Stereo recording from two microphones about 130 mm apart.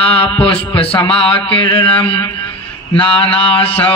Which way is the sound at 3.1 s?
45° left (ahead or behind).